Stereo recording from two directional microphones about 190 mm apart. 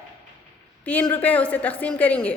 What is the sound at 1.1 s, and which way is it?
A woman's voice, 10° left (ahead or behind).